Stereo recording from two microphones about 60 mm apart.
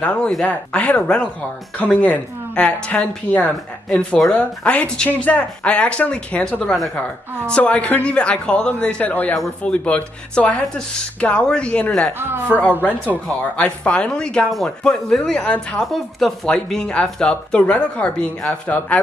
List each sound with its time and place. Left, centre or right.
0.0 s speech: left
12.2 s a man's voice: right
12.4 s speech: left
15.4 s speech: left
15.8 s speech: centre; by 18.8 s left